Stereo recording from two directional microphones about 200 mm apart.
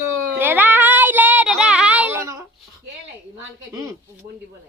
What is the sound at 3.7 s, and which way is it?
Speech, 15° right (ahead or behind).